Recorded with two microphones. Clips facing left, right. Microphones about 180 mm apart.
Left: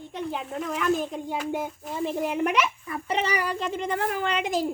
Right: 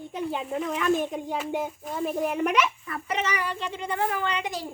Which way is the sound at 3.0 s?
30° left (ahead or behind).